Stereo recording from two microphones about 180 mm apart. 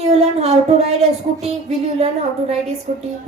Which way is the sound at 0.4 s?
35° right (ahead or behind).